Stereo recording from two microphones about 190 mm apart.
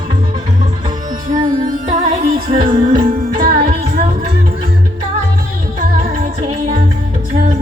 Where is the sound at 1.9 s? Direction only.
35° right (ahead or behind).